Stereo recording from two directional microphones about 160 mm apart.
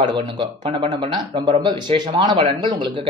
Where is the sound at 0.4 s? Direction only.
35° right (ahead or behind).